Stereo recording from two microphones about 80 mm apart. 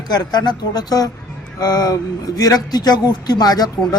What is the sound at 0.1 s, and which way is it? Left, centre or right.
A man's voice, left.